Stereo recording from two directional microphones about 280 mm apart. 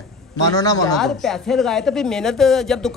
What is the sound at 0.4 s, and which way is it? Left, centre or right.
Speech, centre.